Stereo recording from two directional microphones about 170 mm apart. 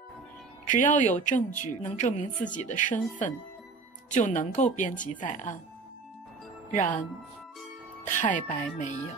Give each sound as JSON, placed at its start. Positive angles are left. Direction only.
{"t": 0.7, "sound": "speech", "side_deg": 50}
{"t": 8.1, "sound": "speech", "side_deg": 50}